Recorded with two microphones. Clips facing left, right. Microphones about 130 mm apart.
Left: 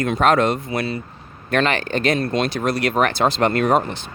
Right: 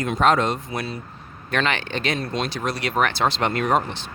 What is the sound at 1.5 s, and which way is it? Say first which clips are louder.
Speech: left 4 dB; 45° left (ahead or behind).